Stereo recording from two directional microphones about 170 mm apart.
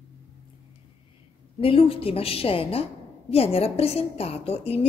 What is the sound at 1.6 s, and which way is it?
A woman's voice, 35° left (ahead or behind).